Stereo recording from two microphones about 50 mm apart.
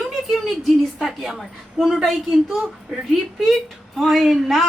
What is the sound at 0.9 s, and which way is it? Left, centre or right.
A woman's voice, centre.